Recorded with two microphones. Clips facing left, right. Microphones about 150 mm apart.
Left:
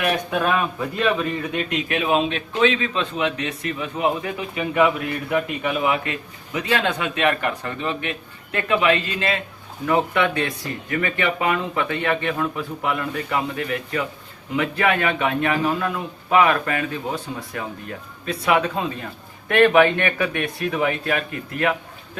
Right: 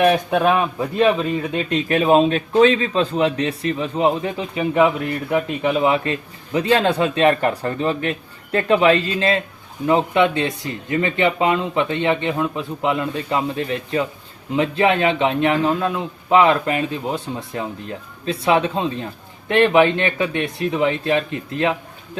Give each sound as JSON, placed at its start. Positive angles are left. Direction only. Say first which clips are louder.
{"t": 0.4, "sound": "a man's voice", "louder": "right 4 dB", "side_deg": -30}
{"t": 9.8, "sound": "a man's voice", "louder": "right 4 dB", "side_deg": -25}